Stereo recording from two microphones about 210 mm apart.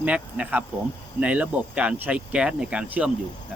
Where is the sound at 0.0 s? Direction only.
5° right (ahead or behind).